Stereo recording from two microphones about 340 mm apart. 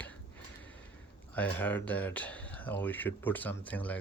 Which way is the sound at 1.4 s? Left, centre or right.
Centre.